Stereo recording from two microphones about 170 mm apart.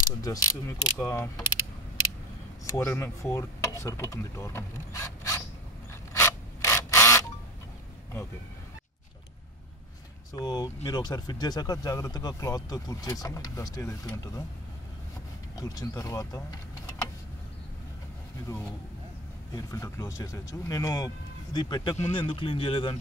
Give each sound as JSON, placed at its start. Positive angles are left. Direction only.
{"t": 0.0, "sound": "speech", "side_deg": 20}
{"t": 2.6, "sound": "speech", "side_deg": 15}
{"t": 6.1, "sound": "a sound", "side_deg": 15}
{"t": 10.3, "sound": "speech", "side_deg": 25}
{"t": 15.6, "sound": "speech", "side_deg": 20}
{"t": 18.5, "sound": "speech", "side_deg": 20}
{"t": 21.9, "sound": "speech", "side_deg": 35}